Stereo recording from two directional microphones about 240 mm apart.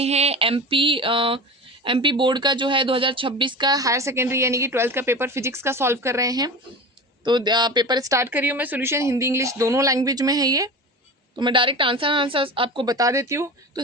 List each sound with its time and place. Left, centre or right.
0.0 s a woman's voice: right